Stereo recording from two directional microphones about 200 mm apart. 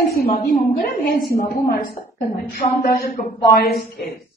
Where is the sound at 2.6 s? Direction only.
30° left (ahead or behind).